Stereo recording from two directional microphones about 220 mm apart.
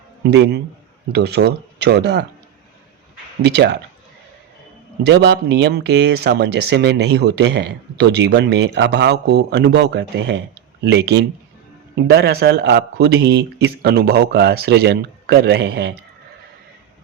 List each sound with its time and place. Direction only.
0.3 s speech: 50° right (ahead or behind)
3.4 s speech: 50° right (ahead or behind)
5.0 s speech: 50° right (ahead or behind)